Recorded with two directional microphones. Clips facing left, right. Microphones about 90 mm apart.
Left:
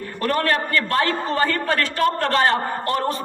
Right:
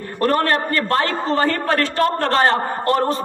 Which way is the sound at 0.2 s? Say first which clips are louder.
Right 3 dB; 35° right (ahead or behind).